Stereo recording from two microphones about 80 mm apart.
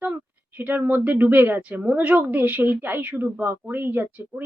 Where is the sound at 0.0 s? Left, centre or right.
Centre.